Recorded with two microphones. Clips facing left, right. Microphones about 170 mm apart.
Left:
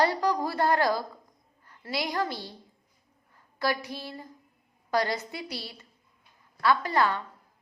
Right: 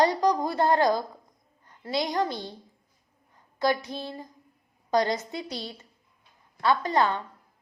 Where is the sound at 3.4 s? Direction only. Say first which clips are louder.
Right 4 dB; 20° right (ahead or behind).